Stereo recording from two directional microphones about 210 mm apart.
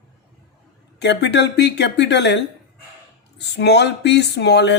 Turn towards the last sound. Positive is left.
turn(degrees=55)  # may be behind; listen again after turning